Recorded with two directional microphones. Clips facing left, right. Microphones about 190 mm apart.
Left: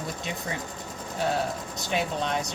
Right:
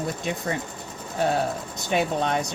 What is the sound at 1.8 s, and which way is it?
Speech, 55° right (ahead or behind).